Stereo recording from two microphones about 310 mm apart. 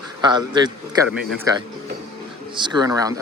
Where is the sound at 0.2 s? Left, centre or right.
Centre.